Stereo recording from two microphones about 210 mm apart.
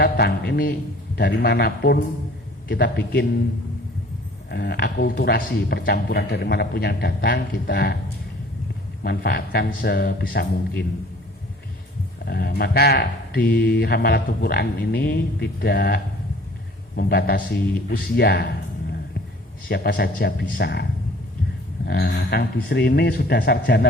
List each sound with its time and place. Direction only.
0.0 s a man's voice: 50° left (ahead or behind)
4.5 s speech: 50° left (ahead or behind)
9.0 s speech: 50° left (ahead or behind)
12.2 s speech: 45° left (ahead or behind)
19.6 s speech: 45° left (ahead or behind)
21.8 s speech: 45° left (ahead or behind)